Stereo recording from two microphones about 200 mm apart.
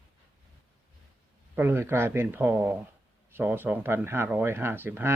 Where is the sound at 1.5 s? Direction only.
10° right (ahead or behind).